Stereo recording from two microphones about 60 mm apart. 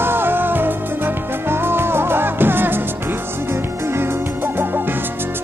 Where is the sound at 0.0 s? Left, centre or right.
Right.